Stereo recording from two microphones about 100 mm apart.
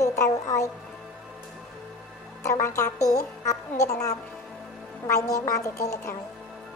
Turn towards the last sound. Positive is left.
turn(degrees=30)  # may be behind; listen again after turning